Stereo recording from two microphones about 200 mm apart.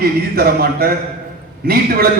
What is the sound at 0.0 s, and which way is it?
A man's voice, 50° right (ahead or behind).